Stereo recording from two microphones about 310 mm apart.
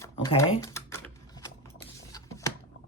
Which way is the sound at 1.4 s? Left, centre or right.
Centre.